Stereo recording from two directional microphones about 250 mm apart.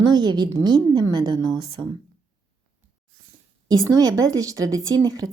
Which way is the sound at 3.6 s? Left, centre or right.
Centre.